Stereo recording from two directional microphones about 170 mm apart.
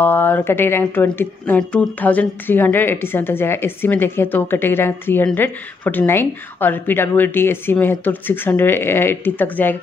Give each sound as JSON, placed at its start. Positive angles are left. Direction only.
{"t": 0.0, "sound": "speech", "side_deg": 10}